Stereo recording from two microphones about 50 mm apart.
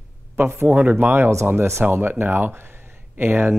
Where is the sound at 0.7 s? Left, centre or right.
Right.